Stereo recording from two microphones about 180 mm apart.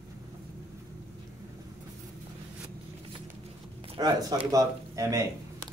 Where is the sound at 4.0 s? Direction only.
20° right (ahead or behind).